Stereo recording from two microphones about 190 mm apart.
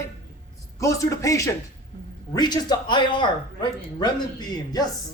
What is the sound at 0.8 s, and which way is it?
A woman's voice, 15° left (ahead or behind).